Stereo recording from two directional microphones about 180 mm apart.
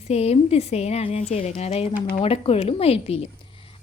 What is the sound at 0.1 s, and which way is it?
A woman's voice, 35° left (ahead or behind).